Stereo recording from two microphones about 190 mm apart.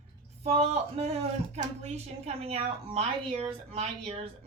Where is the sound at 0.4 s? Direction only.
30° right (ahead or behind).